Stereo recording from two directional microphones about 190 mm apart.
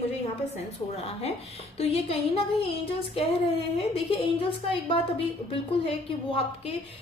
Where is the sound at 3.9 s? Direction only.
30° left (ahead or behind).